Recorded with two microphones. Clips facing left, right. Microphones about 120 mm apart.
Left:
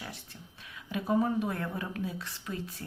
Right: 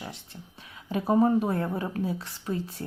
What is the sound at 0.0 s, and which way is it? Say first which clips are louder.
Speech: right 4 dB; 25° right (ahead or behind).